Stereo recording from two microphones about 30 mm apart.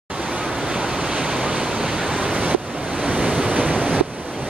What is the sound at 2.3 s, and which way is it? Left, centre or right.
Waves, right.